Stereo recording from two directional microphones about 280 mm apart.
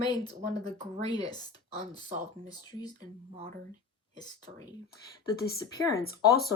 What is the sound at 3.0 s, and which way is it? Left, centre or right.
Speech, right.